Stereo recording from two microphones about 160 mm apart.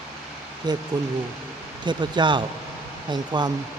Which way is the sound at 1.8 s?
30° right (ahead or behind).